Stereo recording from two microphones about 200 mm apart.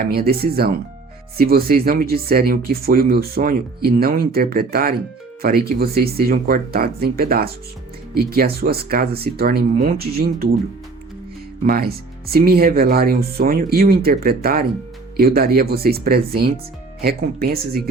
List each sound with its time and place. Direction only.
0.1 s speech: 50° right (ahead or behind)
11.6 s speech: 50° right (ahead or behind)